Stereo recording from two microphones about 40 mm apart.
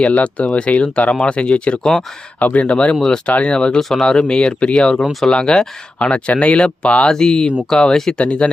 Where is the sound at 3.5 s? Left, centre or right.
Left.